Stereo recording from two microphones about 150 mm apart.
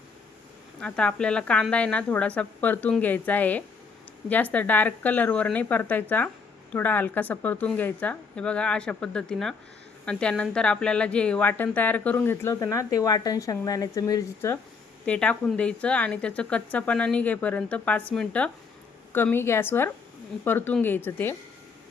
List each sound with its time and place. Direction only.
0.8 s speech: 5° left (ahead or behind)
15.0 s speech: 10° left (ahead or behind)